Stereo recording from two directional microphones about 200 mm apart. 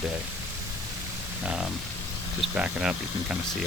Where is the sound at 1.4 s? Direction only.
5° right (ahead or behind).